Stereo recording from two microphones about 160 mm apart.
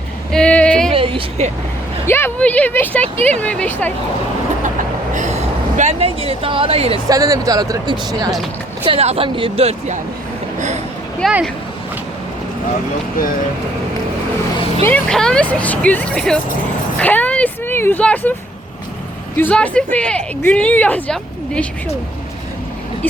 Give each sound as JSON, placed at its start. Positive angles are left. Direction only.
{"t": 0.3, "sound": "a sound", "side_deg": 5}
{"t": 0.9, "sound": "speech", "side_deg": -35}
{"t": 2.0, "sound": "speech", "side_deg": 15}
{"t": 5.1, "sound": "speech", "side_deg": -50}
{"t": 7.1, "sound": "speech", "side_deg": -20}
{"t": 8.8, "sound": "speech", "side_deg": -35}
{"t": 11.2, "sound": "speech", "side_deg": 0}
{"t": 14.8, "sound": "speech", "side_deg": 5}
{"t": 19.4, "sound": "speech", "side_deg": 10}